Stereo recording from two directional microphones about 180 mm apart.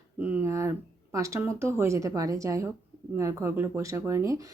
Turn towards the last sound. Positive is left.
turn(degrees=-15)  # may be behind; listen again after turning